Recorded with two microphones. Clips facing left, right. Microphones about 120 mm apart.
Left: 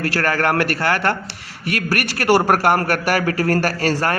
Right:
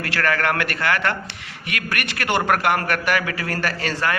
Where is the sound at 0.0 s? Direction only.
35° left (ahead or behind).